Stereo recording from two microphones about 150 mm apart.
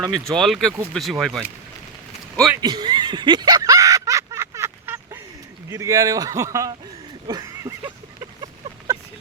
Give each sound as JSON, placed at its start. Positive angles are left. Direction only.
{"t": 0.1, "sound": "speech", "side_deg": 0}
{"t": 2.6, "sound": "snicker", "side_deg": -30}
{"t": 5.6, "sound": "a man's voice", "side_deg": -20}
{"t": 7.3, "sound": "a sound", "side_deg": -25}